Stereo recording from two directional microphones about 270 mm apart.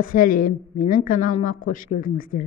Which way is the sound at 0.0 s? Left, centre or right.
Left.